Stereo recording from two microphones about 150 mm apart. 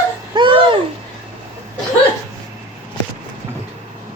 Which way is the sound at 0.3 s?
35° right (ahead or behind).